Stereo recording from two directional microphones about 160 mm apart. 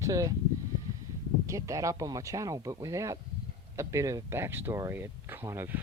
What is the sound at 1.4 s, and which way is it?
Speech, 20° right (ahead or behind).